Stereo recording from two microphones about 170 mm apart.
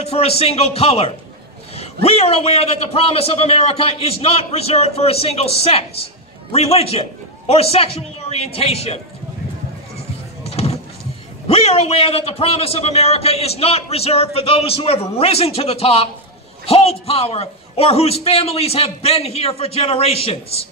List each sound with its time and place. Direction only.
0.0 s a man's voice: 35° left (ahead or behind)
10.4 s a sound: 35° left (ahead or behind)
11.4 s a man's voice: 35° left (ahead or behind)